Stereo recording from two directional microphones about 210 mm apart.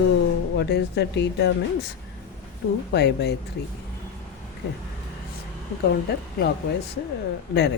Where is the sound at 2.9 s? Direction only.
50° left (ahead or behind).